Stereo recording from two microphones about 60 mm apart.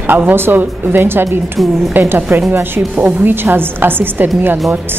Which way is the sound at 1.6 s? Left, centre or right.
Centre.